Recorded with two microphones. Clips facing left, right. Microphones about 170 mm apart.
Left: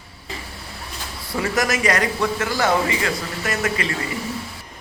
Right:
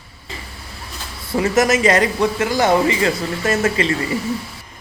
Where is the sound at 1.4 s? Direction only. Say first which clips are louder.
Right 6 dB; 20° right (ahead or behind).